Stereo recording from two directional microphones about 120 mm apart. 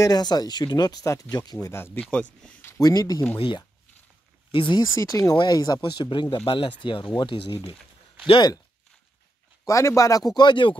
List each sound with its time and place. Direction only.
0.0 s speech: 35° left (ahead or behind)
1.7 s speech: 15° left (ahead or behind)
2.8 s speech: 30° left (ahead or behind)
3.3 s speech: 45° left (ahead or behind)
4.9 s speech: 25° left (ahead or behind)
9.7 s speech: 25° left (ahead or behind); by 10.8 s 40° left (ahead or behind)